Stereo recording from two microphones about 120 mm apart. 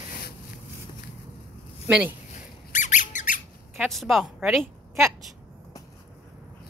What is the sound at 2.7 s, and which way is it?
Squeak, 90° left.